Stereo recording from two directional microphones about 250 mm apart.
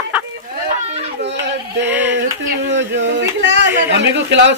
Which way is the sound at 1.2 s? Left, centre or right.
Right.